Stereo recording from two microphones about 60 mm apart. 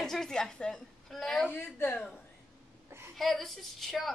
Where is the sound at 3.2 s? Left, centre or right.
Centre.